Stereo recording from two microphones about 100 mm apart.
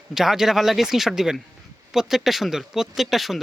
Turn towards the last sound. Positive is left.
turn(degrees=0)  # may be behind; listen again after turning